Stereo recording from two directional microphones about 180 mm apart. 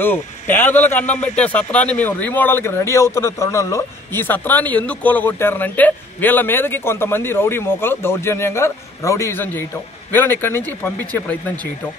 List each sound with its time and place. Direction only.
0.0 s speech: 10° left (ahead or behind)